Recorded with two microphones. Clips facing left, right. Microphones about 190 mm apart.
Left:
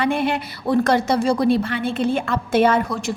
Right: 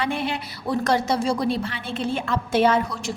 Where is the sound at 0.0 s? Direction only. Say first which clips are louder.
Left 5 dB; 55° left (ahead or behind).